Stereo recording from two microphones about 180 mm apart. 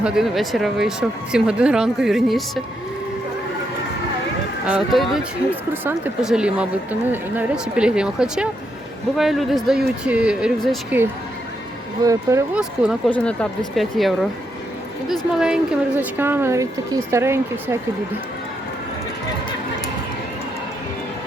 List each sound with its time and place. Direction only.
0.0 s speech: 5° right (ahead or behind)
4.6 s speech: 5° right (ahead or behind)
12.0 s speech: 15° right (ahead or behind)
12.5 s speech: 5° right (ahead or behind)
13.1 s speech: 5° left (ahead or behind)
15.4 s speech: 5° right (ahead or behind)